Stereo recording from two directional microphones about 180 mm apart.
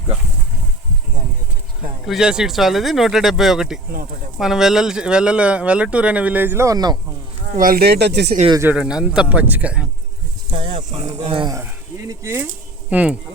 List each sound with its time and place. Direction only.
2.0 s speech: 5° right (ahead or behind); by 6.9 s 20° right (ahead or behind)
7.5 s speech: 50° right (ahead or behind); by 8.4 s 70° right (ahead or behind)
8.6 s speech: 5° right (ahead or behind)
10.5 s speech: 25° right (ahead or behind); by 13.1 s 10° right (ahead or behind)